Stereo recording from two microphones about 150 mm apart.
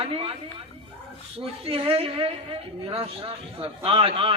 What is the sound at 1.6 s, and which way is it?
A woman's voice, 40° right (ahead or behind).